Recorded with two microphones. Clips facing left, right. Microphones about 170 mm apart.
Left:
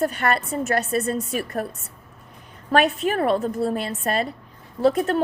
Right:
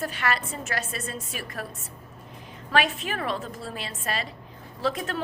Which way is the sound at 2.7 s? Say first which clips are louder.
Left 6 dB; 40° left (ahead or behind).